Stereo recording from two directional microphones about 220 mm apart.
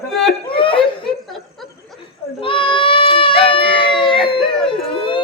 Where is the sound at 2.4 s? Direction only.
25° left (ahead or behind).